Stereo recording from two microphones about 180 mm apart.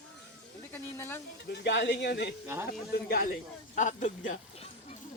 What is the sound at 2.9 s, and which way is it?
Speech, 55° left (ahead or behind).